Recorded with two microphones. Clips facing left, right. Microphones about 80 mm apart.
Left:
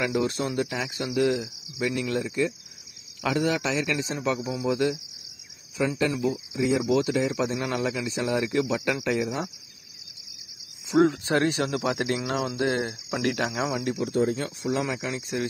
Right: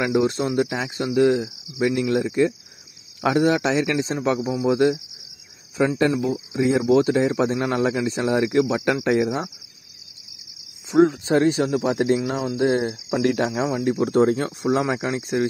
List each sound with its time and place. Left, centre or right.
0.0 s speech: right
5.9 s speech: right
11.1 s speech: right
12.3 s speech: centre; by 13.7 s right
14.0 s speech: right
14.3 s speech: right